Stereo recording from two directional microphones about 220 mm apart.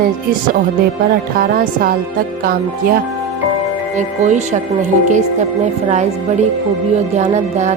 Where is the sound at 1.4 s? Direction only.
40° right (ahead or behind).